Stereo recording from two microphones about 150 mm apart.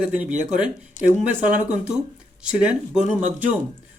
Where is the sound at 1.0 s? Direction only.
55° left (ahead or behind).